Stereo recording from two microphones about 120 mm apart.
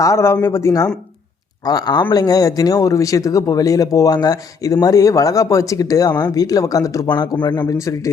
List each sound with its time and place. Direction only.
0.0 s a man's voice: 25° left (ahead or behind)
7.7 s speech: 25° left (ahead or behind)